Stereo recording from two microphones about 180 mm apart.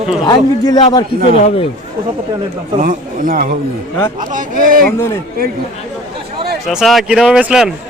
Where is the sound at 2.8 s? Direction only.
50° right (ahead or behind).